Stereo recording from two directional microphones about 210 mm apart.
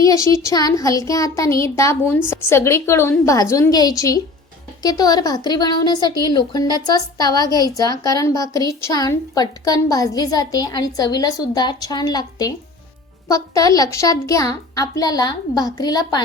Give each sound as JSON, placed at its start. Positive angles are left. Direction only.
{"t": 0.0, "sound": "a woman's voice", "side_deg": 15}